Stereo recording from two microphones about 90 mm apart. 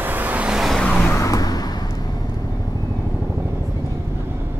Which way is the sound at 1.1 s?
40° left (ahead or behind).